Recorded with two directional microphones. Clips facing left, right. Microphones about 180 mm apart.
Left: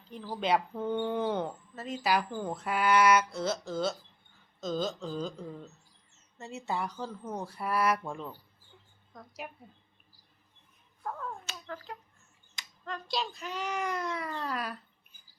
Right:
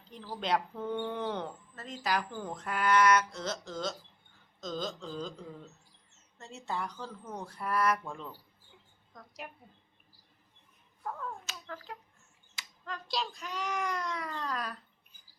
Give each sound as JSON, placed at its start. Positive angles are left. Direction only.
{"t": 0.3, "sound": "a woman's voice", "side_deg": 5}
{"t": 9.1, "sound": "a woman's voice", "side_deg": 5}
{"t": 11.0, "sound": "finger snapping", "side_deg": 0}
{"t": 12.5, "sound": "a child's voice", "side_deg": 0}